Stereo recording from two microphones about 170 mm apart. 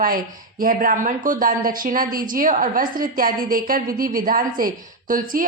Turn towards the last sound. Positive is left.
turn(degrees=-55)  # may be behind; listen again after turning